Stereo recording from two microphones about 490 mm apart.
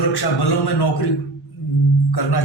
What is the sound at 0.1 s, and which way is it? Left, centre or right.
A man's voice, left.